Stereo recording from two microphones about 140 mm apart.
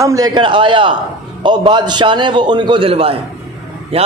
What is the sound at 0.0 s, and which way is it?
A man's voice, 25° right (ahead or behind).